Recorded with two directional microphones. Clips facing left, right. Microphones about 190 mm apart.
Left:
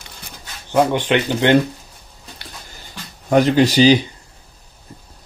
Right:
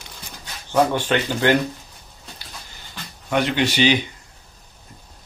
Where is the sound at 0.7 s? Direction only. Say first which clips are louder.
Left 3 dB; 15° left (ahead or behind).